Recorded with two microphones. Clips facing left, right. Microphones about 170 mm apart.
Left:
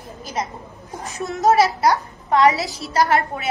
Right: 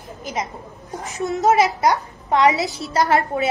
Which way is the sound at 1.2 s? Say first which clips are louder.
Even; 20° right (ahead or behind).